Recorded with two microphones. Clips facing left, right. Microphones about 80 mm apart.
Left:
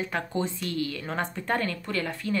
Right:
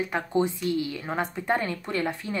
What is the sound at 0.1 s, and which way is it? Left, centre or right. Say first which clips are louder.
Speech: right 4 dB; centre.